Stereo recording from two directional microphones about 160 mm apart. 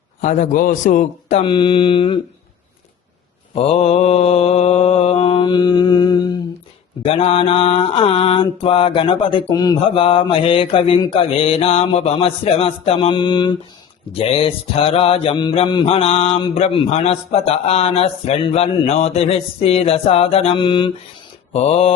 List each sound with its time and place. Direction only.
0.2 s a man's voice: 50° left (ahead or behind)
1.5 s mantra: 30° left (ahead or behind)
3.5 s mantra: 40° left (ahead or behind)
7.0 s mantra: 35° left (ahead or behind)